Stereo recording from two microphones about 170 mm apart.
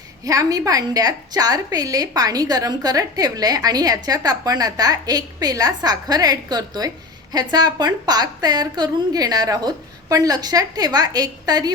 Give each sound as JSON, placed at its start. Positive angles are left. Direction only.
{"t": 0.3, "sound": "a woman's voice", "side_deg": -20}